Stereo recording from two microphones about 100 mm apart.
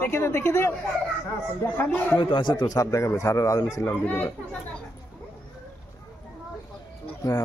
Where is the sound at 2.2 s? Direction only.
50° left (ahead or behind); by 3.6 s 35° left (ahead or behind).